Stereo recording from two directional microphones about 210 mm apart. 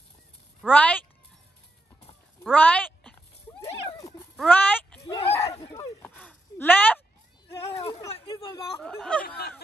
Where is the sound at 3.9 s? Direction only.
15° left (ahead or behind).